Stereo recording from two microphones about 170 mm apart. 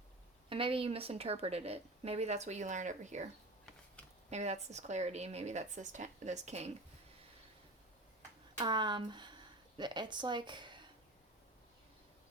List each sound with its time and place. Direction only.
0.5 s a woman's voice: 30° right (ahead or behind)
4.3 s a woman's voice: 40° right (ahead or behind)
8.5 s speech: 25° right (ahead or behind)